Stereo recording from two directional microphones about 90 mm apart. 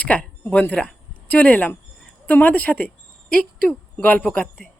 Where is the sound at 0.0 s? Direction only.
15° left (ahead or behind).